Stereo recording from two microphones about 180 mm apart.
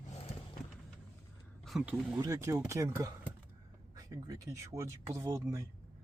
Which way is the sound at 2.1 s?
20° right (ahead or behind).